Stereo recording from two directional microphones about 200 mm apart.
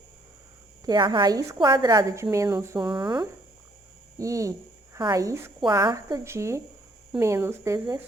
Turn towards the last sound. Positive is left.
turn(degrees=-15)  # may be behind; listen again after turning